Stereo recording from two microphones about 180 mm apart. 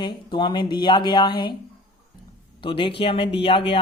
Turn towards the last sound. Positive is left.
turn(degrees=30)  # may be behind; listen again after turning